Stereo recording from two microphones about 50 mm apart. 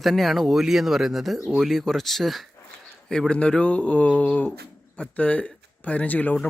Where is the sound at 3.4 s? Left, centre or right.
Left.